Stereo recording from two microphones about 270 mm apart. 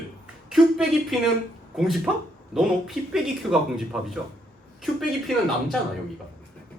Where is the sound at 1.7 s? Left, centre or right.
Centre.